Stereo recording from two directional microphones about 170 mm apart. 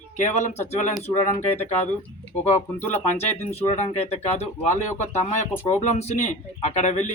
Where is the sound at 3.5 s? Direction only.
40° left (ahead or behind).